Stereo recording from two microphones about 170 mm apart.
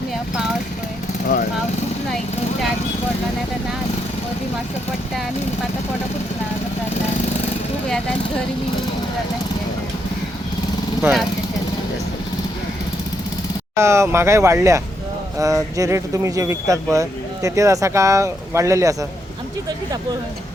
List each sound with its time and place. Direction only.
13.7 s speech: 15° right (ahead or behind)